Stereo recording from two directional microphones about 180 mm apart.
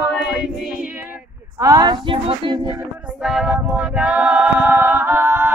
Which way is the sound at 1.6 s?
20° right (ahead or behind).